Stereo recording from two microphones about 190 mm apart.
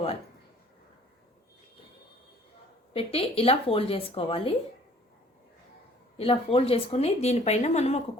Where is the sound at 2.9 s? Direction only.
30° left (ahead or behind).